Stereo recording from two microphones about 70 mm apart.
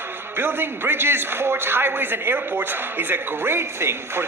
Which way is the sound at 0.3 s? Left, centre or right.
Right.